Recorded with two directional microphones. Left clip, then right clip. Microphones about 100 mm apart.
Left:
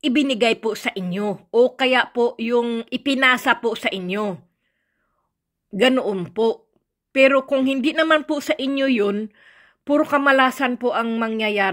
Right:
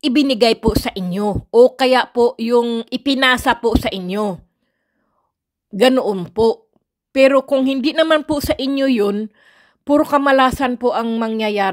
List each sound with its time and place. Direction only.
0.0 s speech: 50° right (ahead or behind)
2.7 s speech: 30° right (ahead or behind)
5.8 s speech: 35° right (ahead or behind)
9.1 s a woman's voice: 30° right (ahead or behind)